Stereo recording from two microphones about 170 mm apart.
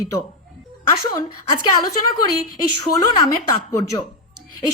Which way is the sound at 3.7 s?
20° left (ahead or behind).